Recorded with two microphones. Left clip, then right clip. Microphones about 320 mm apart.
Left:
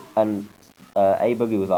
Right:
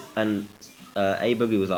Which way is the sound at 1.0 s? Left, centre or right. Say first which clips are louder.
Left 5 dB; centre.